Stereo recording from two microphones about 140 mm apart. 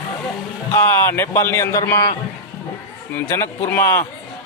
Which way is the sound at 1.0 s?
15° left (ahead or behind).